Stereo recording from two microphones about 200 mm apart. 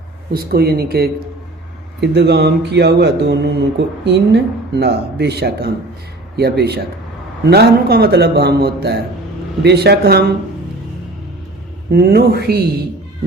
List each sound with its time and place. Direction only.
0.3 s a man's voice: 50° right (ahead or behind)
11.9 s a man's voice: 50° right (ahead or behind)